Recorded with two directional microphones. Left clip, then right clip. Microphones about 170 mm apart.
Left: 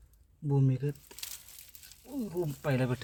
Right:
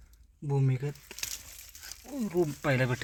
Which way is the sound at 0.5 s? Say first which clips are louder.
Left 1 dB; 25° right (ahead or behind).